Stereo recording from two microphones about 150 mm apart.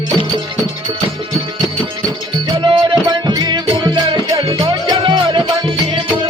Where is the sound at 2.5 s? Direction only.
35° right (ahead or behind).